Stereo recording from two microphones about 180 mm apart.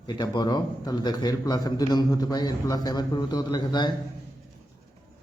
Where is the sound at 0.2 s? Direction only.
25° left (ahead or behind).